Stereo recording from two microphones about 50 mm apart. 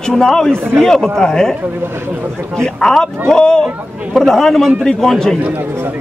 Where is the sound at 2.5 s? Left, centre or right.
Centre.